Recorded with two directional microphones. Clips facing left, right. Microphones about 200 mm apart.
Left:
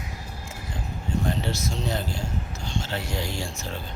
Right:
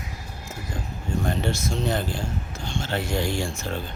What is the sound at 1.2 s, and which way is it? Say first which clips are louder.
Speech: right 3 dB; 50° right (ahead or behind).